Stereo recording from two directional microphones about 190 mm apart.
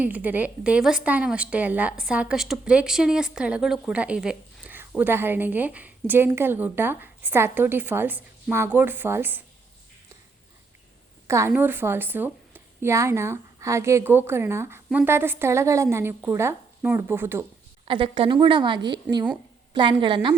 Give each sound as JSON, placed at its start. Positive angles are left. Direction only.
{"t": 0.0, "sound": "a woman's voice", "side_deg": -10}
{"t": 11.3, "sound": "a woman's voice", "side_deg": -15}
{"t": 17.8, "sound": "a woman's voice", "side_deg": -25}